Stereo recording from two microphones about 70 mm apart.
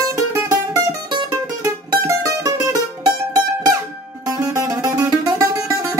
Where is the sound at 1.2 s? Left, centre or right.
Right.